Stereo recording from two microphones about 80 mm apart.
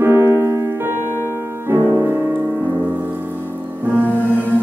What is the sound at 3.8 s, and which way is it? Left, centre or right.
Music, right.